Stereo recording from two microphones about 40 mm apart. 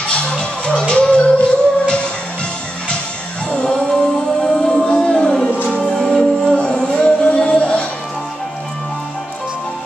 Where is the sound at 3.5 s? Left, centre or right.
Left.